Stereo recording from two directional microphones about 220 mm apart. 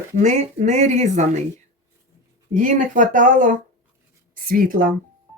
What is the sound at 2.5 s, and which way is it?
Speech, 35° right (ahead or behind).